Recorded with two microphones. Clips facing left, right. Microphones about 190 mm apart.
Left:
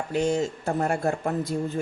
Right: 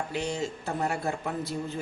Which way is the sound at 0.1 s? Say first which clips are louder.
Left 7 dB; 45° left (ahead or behind).